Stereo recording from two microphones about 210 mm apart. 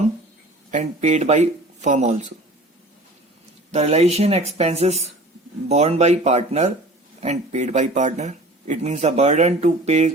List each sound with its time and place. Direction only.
0.7 s speech: 35° right (ahead or behind)
3.7 s speech: 30° right (ahead or behind)